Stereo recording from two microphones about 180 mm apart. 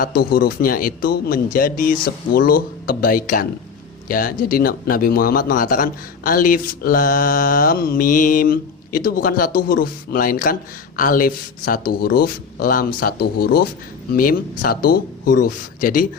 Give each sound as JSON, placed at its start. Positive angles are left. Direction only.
{"t": 0.0, "sound": "speech", "side_deg": 60}